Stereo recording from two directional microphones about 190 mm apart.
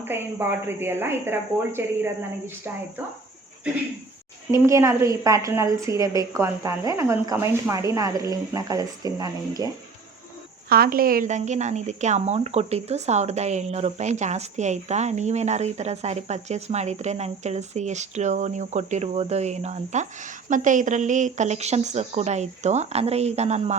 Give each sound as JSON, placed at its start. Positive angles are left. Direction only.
{"t": 0.0, "sound": "a woman's voice", "side_deg": -10}
{"t": 4.5, "sound": "a woman's voice", "side_deg": -15}
{"t": 10.7, "sound": "speech", "side_deg": -50}